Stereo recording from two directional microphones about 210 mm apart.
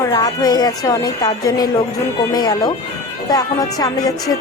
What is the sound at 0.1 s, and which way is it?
A woman's voice, 20° left (ahead or behind).